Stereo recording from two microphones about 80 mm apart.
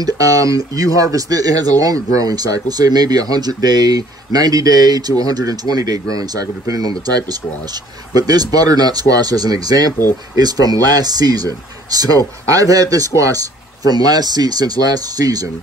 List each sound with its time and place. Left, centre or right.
0.0 s speech: right